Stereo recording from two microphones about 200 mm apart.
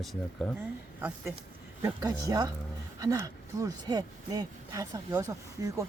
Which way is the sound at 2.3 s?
20° right (ahead or behind).